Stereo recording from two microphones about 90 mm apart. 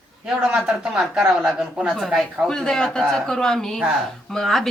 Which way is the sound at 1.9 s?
5° left (ahead or behind).